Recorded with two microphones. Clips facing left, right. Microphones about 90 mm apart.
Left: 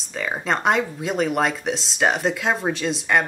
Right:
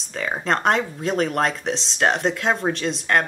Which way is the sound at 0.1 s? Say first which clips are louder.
Right 1 dB; centre (ahead or behind).